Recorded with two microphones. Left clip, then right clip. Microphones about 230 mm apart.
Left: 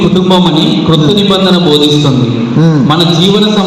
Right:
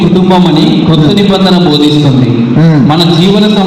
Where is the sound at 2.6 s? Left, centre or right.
Right.